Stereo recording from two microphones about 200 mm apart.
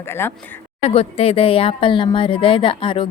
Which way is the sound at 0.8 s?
30° left (ahead or behind).